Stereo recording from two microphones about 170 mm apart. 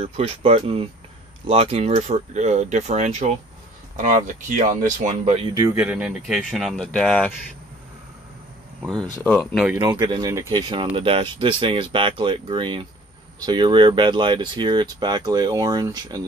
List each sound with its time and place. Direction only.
0.0 s speech: 35° right (ahead or behind)
5.5 s speech: 20° right (ahead or behind)
5.8 s speech: 5° right (ahead or behind)
9.2 s speech: 10° left (ahead or behind)
9.8 s speech: 25° right (ahead or behind)